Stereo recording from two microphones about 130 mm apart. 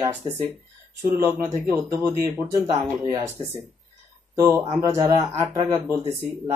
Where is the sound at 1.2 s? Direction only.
20° right (ahead or behind).